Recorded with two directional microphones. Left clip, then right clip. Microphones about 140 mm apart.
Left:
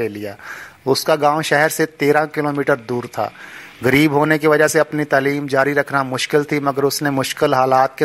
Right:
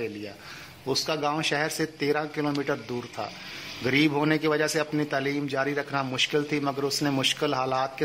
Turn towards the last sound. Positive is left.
turn(degrees=40)  # may be behind; listen again after turning